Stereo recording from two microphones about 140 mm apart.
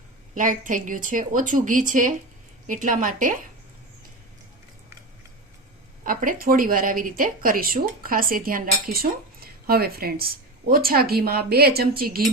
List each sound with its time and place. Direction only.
0.3 s a woman's voice: 70° right (ahead or behind)
6.0 s speech: 75° right (ahead or behind)